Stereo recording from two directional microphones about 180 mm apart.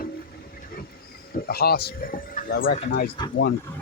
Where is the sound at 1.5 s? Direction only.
60° left (ahead or behind).